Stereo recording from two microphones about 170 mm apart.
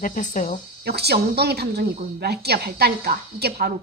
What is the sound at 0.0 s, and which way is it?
Speech, 50° left (ahead or behind).